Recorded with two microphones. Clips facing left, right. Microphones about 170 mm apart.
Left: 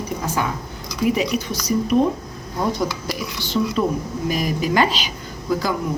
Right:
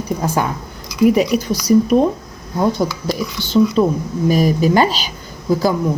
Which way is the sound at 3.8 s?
35° right (ahead or behind).